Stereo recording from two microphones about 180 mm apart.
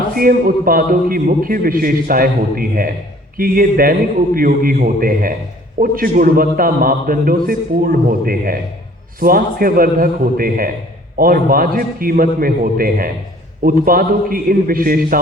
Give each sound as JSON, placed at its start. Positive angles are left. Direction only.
{"t": 0.1, "sound": "a man's voice", "side_deg": -50}